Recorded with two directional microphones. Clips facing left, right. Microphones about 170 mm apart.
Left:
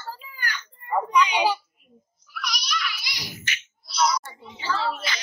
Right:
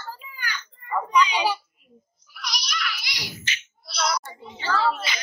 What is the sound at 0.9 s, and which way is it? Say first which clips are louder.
Child singing: even; 15° left (ahead or behind).